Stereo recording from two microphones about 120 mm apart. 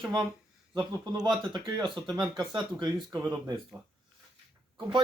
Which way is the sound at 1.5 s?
40° right (ahead or behind).